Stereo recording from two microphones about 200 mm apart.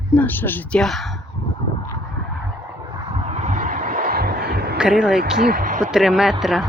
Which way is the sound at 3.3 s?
35° right (ahead or behind).